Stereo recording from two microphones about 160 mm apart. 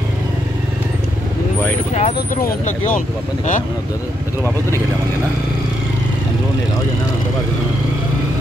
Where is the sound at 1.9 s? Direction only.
45° left (ahead or behind).